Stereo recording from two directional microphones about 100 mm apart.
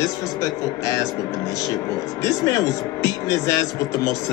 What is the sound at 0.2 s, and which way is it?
Speech, 35° left (ahead or behind).